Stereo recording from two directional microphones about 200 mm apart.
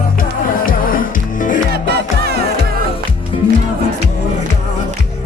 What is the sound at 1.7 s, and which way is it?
Music, 55° right (ahead or behind).